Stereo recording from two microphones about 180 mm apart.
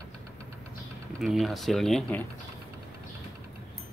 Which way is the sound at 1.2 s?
Centre (ahead or behind).